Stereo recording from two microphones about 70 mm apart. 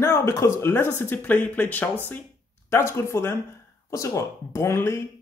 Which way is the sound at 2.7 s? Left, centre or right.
Left.